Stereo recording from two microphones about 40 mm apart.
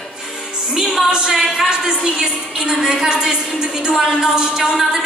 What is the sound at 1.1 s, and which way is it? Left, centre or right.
Female singing, centre.